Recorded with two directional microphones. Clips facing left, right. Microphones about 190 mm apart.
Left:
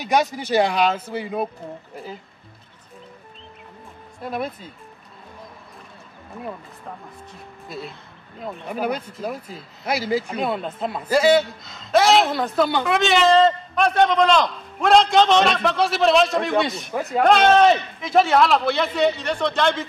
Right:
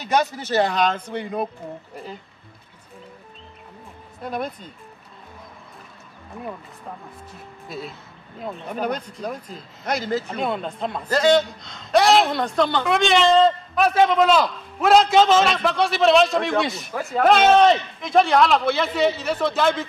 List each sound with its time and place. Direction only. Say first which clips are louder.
0.0 s speech: left 1 dB; 15° left (ahead or behind)
4.2 s speech: left 1 dB; 5° left (ahead or behind)
7.6 s speech: even; centre (ahead or behind)